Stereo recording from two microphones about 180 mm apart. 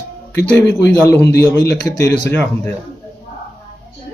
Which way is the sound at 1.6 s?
65° left (ahead or behind).